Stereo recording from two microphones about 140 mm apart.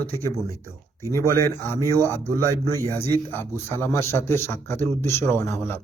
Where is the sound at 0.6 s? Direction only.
20° right (ahead or behind).